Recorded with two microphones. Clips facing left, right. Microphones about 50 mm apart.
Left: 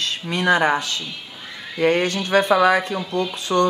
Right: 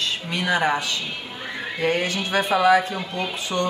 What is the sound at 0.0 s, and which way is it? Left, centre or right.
A woman's voice, left.